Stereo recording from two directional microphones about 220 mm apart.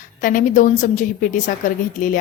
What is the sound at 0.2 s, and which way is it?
A woman's voice, 35° left (ahead or behind).